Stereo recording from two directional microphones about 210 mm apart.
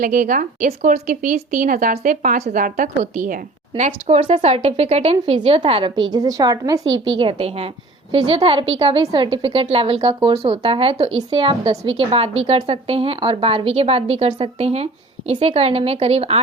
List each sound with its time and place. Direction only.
0.0 s a woman's voice: 40° right (ahead or behind); by 6.8 s 15° right (ahead or behind)
6.8 s a woman's voice: 65° right (ahead or behind)
7.2 s a woman's voice: 25° right (ahead or behind)